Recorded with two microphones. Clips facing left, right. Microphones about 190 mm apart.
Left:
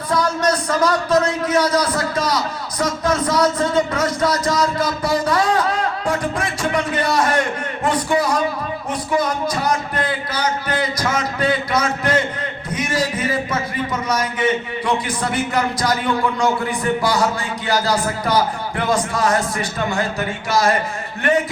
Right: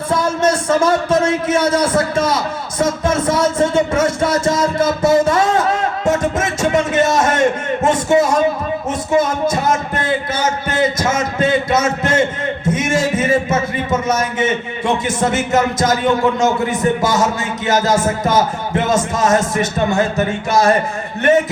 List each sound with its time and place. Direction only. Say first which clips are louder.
0.1 s speech: right 2 dB; 25° right (ahead or behind)